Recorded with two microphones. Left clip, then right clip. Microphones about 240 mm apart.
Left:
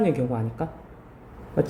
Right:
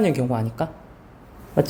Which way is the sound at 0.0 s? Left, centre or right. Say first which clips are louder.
Right 2 dB; right.